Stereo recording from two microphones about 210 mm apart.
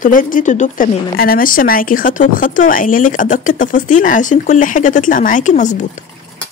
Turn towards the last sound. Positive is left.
turn(degrees=35)  # may be behind; listen again after turning